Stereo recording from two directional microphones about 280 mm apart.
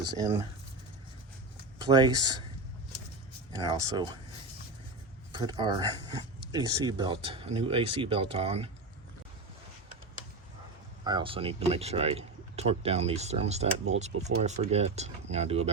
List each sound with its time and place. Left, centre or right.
0.0 s speech: centre
1.8 s speech: centre
3.5 s speech: centre
5.3 s speech: centre
11.0 s speech: centre